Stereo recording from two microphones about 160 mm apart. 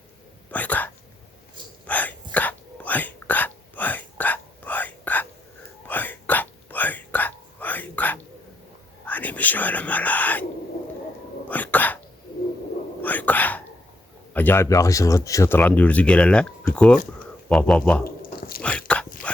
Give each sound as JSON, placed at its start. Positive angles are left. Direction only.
{"t": 0.5, "sound": "a sound", "side_deg": 10}
{"t": 1.9, "sound": "a sound", "side_deg": 10}
{"t": 5.9, "sound": "whispering", "side_deg": 10}
{"t": 11.4, "sound": "dog", "side_deg": 10}
{"t": 13.0, "sound": "whispering", "side_deg": 10}
{"t": 14.3, "sound": "speech", "side_deg": 15}
{"t": 18.0, "sound": "biting", "side_deg": 65}
{"t": 18.6, "sound": "dog", "side_deg": 5}